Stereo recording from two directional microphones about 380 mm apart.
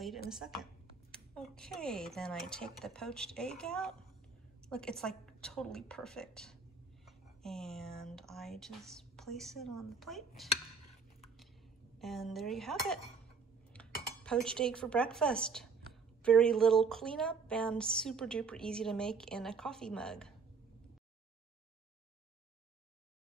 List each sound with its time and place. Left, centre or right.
0.3 s a woman's voice: centre
12.0 s a woman's voice: centre